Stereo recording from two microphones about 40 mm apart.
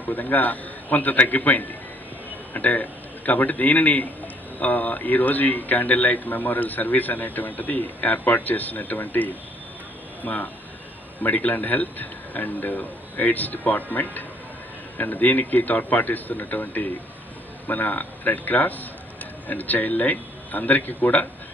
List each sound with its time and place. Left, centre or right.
0.1 s a man's voice: left
10.2 s speech: left
11.5 s a man's voice: left